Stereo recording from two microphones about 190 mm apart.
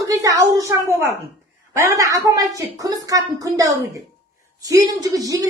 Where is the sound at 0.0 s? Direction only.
20° right (ahead or behind).